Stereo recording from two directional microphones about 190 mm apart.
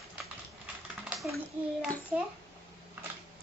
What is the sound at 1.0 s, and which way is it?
A child's voice, centre (ahead or behind).